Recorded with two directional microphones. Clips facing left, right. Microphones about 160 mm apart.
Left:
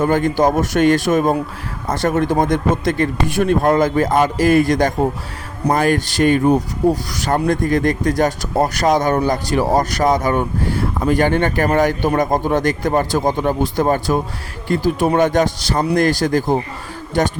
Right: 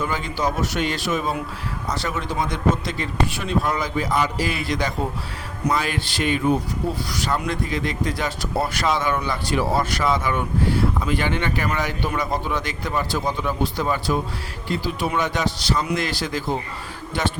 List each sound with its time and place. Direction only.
0.0 s speech: 50° left (ahead or behind)